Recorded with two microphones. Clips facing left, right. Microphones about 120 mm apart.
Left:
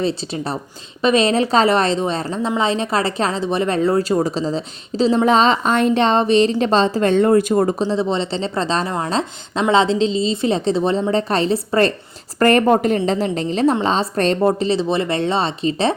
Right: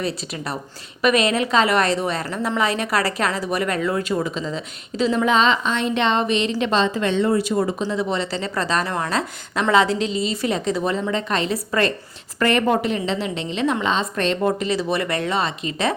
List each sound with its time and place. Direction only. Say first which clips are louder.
0.0 s a woman's voice: left 5 dB; 30° left (ahead or behind); by 7.9 s 45° left (ahead or behind)
7.9 s a woman's voice: left 4 dB; 25° left (ahead or behind)